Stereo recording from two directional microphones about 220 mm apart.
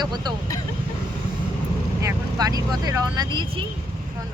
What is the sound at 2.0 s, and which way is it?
Speech, 15° right (ahead or behind).